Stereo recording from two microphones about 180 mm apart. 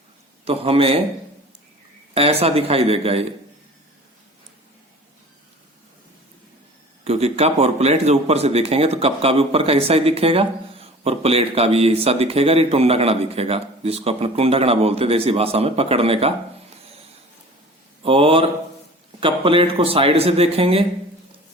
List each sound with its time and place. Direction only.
0.4 s a man's voice: 30° right (ahead or behind)
2.1 s a man's voice: 35° right (ahead or behind)
7.0 s a man's voice: 35° right (ahead or behind)
18.0 s a man's voice: 30° right (ahead or behind)